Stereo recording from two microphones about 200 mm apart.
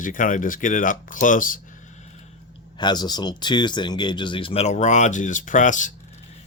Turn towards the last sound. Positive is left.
turn(degrees=40)  # may be behind; listen again after turning